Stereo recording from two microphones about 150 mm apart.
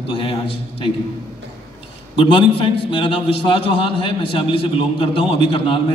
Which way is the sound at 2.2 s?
35° left (ahead or behind).